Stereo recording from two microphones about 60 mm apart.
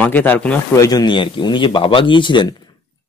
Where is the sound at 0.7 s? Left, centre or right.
Left.